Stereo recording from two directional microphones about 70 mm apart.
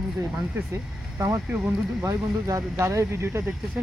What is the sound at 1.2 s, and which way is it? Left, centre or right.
Speech, right.